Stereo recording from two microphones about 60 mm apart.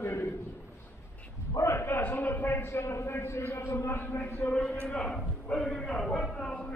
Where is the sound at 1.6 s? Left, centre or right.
Left.